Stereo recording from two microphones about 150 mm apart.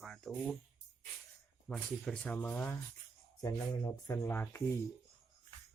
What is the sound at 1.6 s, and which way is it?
Speech, 5° left (ahead or behind).